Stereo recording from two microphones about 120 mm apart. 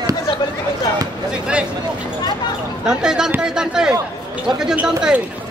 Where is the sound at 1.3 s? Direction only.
10° right (ahead or behind).